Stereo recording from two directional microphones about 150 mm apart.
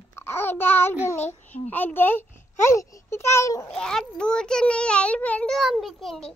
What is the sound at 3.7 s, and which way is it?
A child's voice, 5° left (ahead or behind).